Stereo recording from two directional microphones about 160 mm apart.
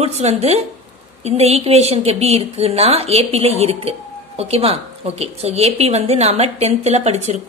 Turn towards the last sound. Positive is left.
turn(degrees=-40)  # may be behind; listen again after turning